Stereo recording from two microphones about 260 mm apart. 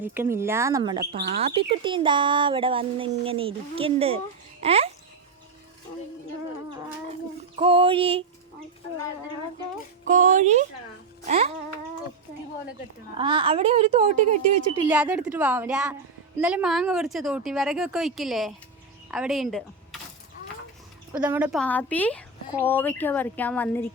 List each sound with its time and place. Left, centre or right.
0.0 s speech: centre
7.1 s speech: right
10.1 s speech: right
13.1 s speech: centre
14.8 s speech: centre
21.1 s speech: centre